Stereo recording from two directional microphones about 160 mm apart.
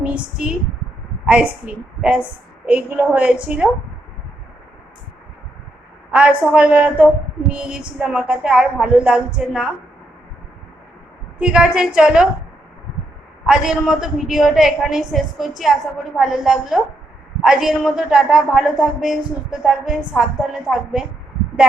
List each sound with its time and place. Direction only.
0.0 s speech: 5° right (ahead or behind)
6.1 s speech: 5° right (ahead or behind)
11.3 s speech: 5° right (ahead or behind)
13.4 s speech: 5° right (ahead or behind)